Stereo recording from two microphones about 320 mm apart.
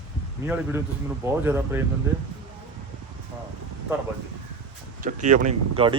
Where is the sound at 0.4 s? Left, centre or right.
Centre.